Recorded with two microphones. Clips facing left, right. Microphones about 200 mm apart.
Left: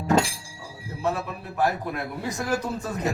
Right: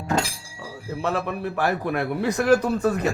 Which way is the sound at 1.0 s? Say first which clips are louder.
Right 3 dB; 80° right.